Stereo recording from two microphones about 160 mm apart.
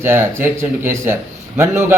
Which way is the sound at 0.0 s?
15° right (ahead or behind).